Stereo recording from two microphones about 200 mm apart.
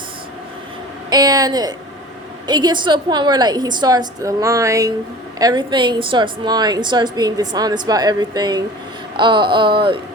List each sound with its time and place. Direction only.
1.1 s a woman's voice: 20° right (ahead or behind)